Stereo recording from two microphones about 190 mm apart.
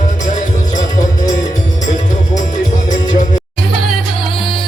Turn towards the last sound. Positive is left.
turn(degrees=40)  # may be behind; listen again after turning